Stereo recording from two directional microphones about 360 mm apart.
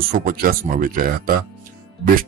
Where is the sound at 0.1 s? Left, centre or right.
Right.